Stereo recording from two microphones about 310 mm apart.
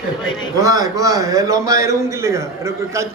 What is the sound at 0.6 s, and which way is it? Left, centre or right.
A man's voice, centre.